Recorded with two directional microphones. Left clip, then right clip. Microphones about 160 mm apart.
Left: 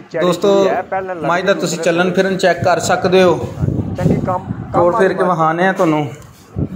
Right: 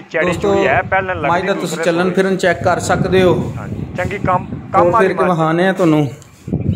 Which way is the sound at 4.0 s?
25° left (ahead or behind).